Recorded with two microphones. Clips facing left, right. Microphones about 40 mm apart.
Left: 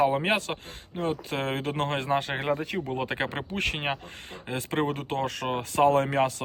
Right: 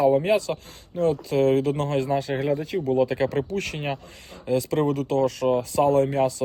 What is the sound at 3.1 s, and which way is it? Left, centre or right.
Speech, left.